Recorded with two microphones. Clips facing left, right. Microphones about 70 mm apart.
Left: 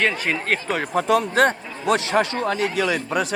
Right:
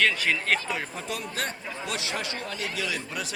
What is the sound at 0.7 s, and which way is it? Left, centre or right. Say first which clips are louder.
Speech: left 13 dB; left.